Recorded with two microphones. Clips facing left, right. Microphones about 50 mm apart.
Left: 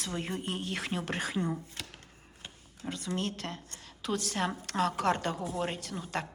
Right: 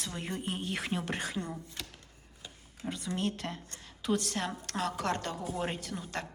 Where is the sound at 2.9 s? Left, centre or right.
Centre.